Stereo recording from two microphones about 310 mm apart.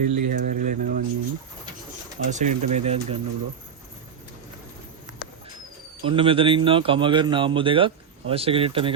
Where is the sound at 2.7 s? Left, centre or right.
Right.